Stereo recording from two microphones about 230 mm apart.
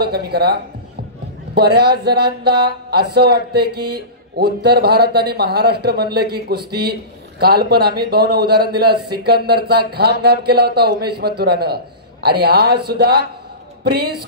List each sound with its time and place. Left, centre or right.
0.0 s speech: right